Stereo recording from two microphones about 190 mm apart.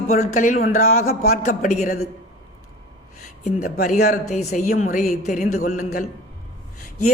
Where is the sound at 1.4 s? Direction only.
40° left (ahead or behind).